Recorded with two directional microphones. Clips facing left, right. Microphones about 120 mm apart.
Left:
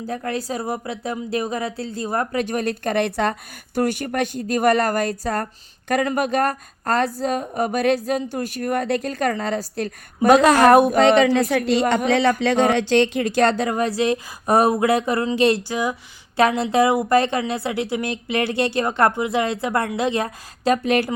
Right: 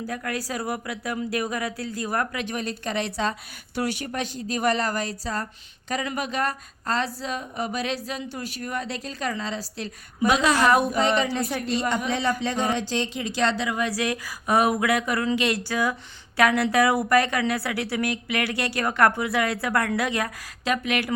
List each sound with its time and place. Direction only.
0.0 s a woman's voice: 30° left (ahead or behind)
2.4 s a woman's voice: 45° left (ahead or behind)
13.9 s a woman's voice: 25° left (ahead or behind)
14.4 s a woman's voice: 40° left (ahead or behind)